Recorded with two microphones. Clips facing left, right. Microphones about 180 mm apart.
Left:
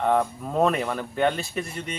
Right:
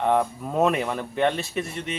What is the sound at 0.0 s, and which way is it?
Speech, centre (ahead or behind).